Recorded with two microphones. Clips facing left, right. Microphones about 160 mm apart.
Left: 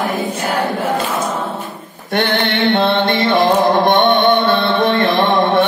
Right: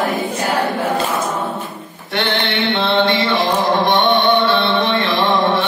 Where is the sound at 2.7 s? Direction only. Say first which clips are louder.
Right 1 dB; 50° left (ahead or behind).